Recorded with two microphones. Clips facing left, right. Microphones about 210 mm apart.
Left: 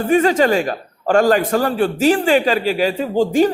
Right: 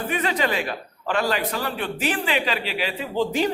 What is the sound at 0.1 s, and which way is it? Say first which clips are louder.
A man's voice: left 12 dB; 45° left (ahead or behind).